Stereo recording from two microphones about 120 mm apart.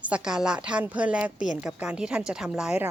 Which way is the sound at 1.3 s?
90° left.